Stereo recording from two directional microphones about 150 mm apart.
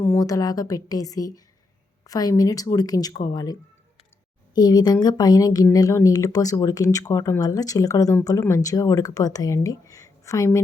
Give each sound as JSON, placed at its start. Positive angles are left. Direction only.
{"t": 0.0, "sound": "speech", "side_deg": 20}